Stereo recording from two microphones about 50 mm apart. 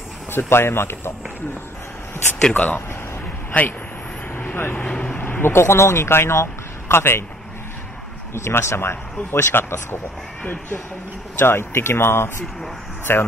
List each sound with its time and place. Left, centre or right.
0.3 s speech: left
2.5 s speech: left
5.0 s speech: left
8.5 s speech: left
11.3 s speech: left